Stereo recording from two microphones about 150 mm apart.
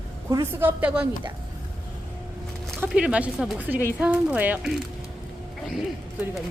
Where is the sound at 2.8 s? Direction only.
5° right (ahead or behind).